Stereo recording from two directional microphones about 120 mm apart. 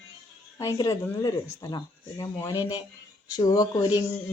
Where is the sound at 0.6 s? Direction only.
30° left (ahead or behind).